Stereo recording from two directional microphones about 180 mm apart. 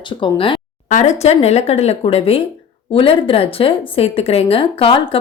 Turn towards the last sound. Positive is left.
turn(degrees=30)  # may be behind; listen again after turning